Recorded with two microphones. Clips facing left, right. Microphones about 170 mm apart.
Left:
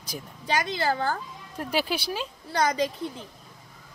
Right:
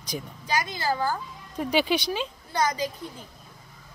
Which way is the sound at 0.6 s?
65° left (ahead or behind).